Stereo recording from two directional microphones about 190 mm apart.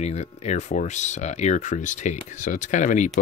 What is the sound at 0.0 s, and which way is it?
Speech, 35° left (ahead or behind).